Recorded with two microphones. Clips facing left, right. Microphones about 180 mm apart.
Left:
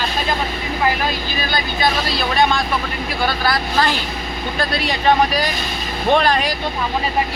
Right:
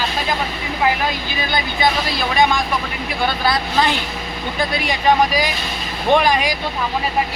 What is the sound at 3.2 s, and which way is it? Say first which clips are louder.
Speech: right 1 dB; 20° right (ahead or behind).